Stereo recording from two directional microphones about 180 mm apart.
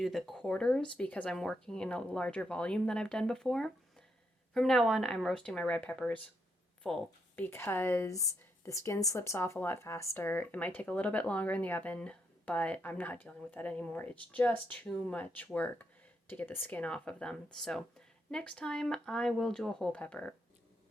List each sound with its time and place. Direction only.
0.0 s speech: centre (ahead or behind)